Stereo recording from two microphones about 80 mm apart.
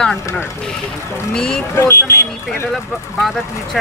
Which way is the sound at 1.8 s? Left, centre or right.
Left.